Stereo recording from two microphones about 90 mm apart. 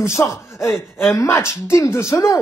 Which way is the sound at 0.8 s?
Centre (ahead or behind).